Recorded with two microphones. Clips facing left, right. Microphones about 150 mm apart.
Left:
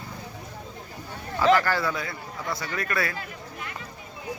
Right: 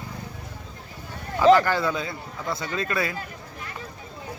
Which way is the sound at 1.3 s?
15° right (ahead or behind).